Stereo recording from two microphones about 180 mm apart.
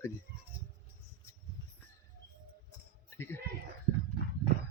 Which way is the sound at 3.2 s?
10° left (ahead or behind).